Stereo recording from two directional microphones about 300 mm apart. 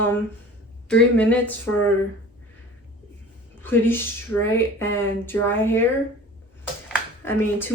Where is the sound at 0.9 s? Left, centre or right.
Centre.